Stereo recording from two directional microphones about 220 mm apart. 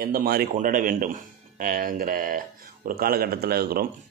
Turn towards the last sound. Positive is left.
turn(degrees=-45)  # may be behind; listen again after turning